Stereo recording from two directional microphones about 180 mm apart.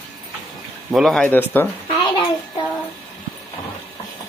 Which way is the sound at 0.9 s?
Centre (ahead or behind).